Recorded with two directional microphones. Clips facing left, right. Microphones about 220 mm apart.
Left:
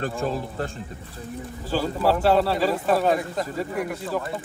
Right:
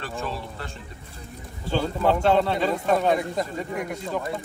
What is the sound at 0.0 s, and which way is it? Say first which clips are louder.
Speech: left 5 dB; 45° left (ahead or behind).